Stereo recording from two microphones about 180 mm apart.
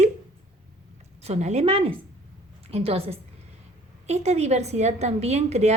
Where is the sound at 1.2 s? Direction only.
40° right (ahead or behind).